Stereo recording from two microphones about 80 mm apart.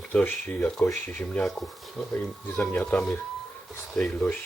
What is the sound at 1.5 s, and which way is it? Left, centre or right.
Speech, centre.